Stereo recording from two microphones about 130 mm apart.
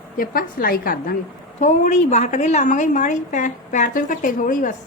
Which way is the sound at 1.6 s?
65° left (ahead or behind).